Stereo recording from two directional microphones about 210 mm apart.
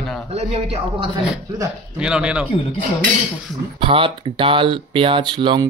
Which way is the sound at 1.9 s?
5° right (ahead or behind).